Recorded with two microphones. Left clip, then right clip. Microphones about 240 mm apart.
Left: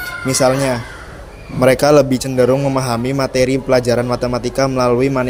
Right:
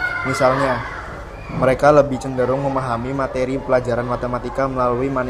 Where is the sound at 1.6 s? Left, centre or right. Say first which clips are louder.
Left 2 dB; left.